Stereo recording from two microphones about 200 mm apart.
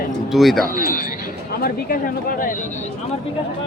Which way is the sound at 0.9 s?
45° left (ahead or behind).